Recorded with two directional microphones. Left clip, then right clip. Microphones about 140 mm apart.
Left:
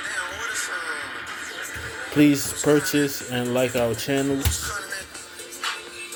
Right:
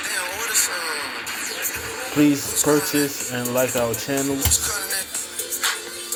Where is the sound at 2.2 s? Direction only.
40° left (ahead or behind).